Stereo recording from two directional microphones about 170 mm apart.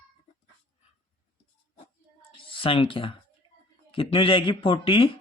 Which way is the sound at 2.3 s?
30° left (ahead or behind).